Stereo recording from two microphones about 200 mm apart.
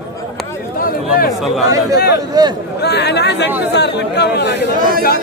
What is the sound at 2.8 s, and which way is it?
Speech, 55° left (ahead or behind).